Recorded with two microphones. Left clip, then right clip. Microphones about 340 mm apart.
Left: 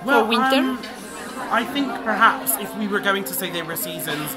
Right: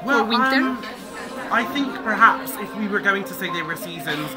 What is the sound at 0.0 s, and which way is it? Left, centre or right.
A man's voice, centre.